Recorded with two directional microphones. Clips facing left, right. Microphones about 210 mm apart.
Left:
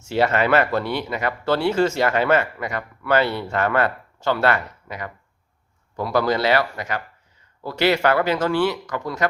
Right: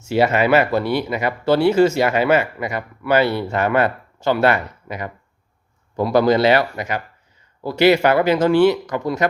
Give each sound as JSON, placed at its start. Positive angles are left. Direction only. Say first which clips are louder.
{"t": 0.1, "sound": "speech", "louder": "right 3 dB", "side_deg": -10}